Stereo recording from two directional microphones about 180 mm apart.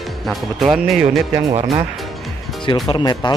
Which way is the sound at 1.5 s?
35° right (ahead or behind).